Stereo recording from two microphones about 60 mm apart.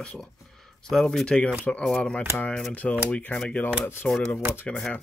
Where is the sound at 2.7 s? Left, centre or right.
Left.